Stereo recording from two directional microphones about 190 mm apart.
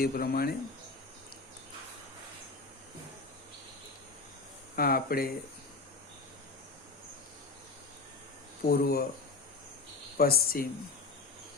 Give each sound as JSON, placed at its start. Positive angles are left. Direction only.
{"t": 0.0, "sound": "speech", "side_deg": 50}
{"t": 4.8, "sound": "speech", "side_deg": 50}
{"t": 8.7, "sound": "speech", "side_deg": 50}
{"t": 10.2, "sound": "speech", "side_deg": 55}